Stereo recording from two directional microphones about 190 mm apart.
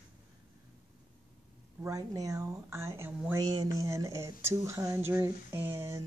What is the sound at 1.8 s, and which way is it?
Speech, 20° right (ahead or behind).